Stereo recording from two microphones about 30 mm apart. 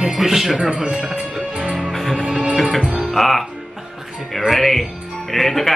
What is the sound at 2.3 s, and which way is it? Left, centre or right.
Music, right.